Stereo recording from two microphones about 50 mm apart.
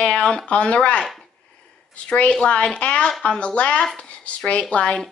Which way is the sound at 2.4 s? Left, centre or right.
Left.